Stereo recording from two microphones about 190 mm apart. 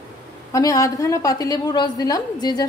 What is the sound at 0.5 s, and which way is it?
A woman's voice, 20° left (ahead or behind).